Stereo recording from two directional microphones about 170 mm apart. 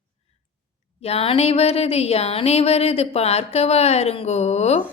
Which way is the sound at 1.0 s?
35° left (ahead or behind).